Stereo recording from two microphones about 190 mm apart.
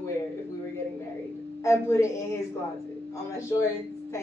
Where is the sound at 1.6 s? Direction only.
15° left (ahead or behind).